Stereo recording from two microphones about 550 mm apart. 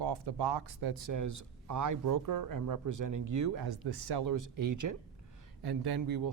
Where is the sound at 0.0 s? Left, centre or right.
Right.